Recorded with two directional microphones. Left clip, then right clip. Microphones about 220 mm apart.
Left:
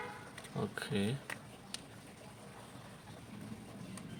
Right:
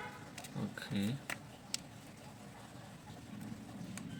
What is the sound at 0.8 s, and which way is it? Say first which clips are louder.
Speech: left 3 dB; 50° left (ahead or behind).